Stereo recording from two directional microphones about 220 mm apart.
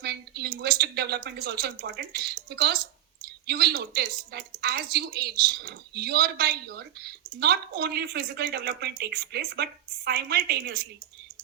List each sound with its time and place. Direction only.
0.0 s a woman's voice: 45° right (ahead or behind)